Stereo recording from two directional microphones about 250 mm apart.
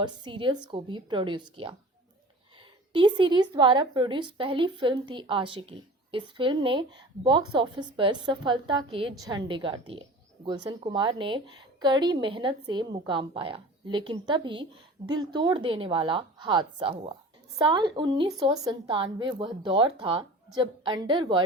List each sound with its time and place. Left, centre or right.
0.0 s a woman's voice: centre
2.9 s a woman's voice: centre